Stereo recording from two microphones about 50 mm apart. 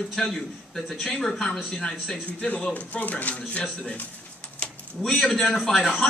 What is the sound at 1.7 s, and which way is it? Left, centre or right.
Speech, centre.